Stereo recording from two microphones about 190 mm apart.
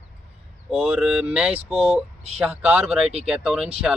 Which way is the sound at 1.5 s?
30° right (ahead or behind).